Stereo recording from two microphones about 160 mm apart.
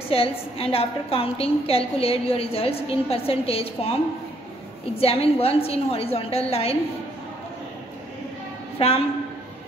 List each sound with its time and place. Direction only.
0.1 s a woman's voice: 35° left (ahead or behind)
5.0 s a woman's voice: 40° left (ahead or behind)
8.7 s a woman's voice: 40° left (ahead or behind)